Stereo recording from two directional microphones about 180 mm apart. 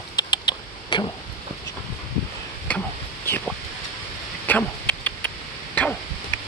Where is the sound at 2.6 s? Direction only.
10° left (ahead or behind).